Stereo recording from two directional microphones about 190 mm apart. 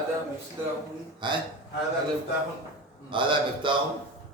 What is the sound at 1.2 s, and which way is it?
Speech, 25° right (ahead or behind).